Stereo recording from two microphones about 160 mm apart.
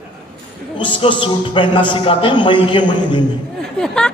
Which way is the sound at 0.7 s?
30° left (ahead or behind).